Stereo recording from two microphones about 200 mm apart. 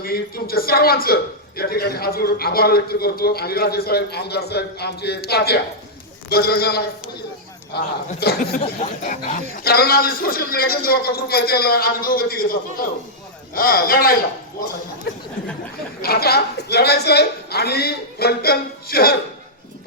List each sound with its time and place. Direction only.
0.0 s a man's voice: 50° left (ahead or behind)
8.6 s speech: 35° left (ahead or behind)
9.6 s a man's voice: 50° left (ahead or behind)
16.0 s a man's voice: 50° left (ahead or behind)